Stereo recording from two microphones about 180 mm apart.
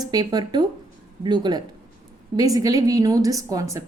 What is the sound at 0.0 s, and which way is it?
A woman's voice, 20° right (ahead or behind).